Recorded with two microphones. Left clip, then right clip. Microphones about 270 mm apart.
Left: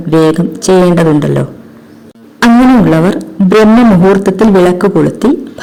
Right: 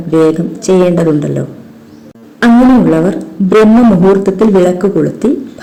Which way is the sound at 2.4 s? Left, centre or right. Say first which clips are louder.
Left 1 dB; left.